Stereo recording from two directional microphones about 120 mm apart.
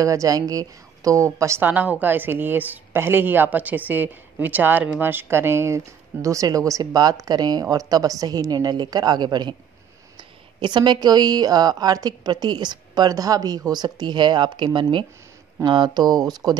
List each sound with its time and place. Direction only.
0.0 s speech: 30° right (ahead or behind)